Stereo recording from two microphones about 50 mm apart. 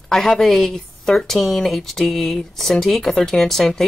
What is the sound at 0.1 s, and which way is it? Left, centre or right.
Speech, centre.